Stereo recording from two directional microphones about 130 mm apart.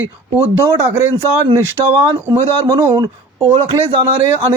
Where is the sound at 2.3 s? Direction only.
30° right (ahead or behind).